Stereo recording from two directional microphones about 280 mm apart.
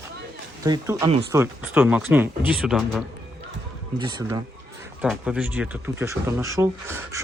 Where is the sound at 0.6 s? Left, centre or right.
Centre.